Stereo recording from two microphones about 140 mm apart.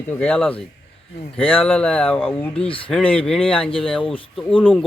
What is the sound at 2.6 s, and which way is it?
Speech, 40° left (ahead or behind).